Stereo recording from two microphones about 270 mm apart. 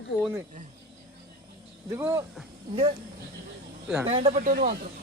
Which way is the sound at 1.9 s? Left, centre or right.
Centre.